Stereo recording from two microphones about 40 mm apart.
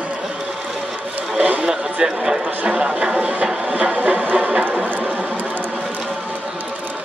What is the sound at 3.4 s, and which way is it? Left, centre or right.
Music, centre.